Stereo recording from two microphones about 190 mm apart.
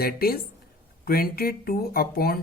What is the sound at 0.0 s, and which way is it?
Speech, 50° left (ahead or behind).